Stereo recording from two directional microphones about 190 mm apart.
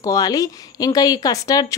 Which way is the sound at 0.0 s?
20° left (ahead or behind).